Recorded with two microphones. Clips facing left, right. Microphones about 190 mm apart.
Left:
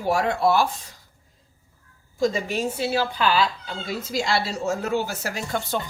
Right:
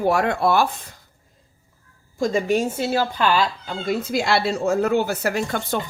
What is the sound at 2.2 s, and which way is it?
Speech, 50° right (ahead or behind).